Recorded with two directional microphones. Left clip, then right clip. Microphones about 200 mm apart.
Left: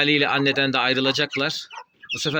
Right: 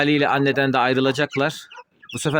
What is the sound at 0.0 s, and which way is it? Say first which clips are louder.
Speech: right 1 dB; 35° right (ahead or behind).